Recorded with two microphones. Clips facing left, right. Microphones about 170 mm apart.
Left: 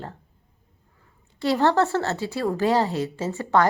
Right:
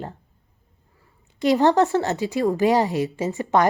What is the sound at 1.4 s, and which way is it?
Speech, 15° right (ahead or behind).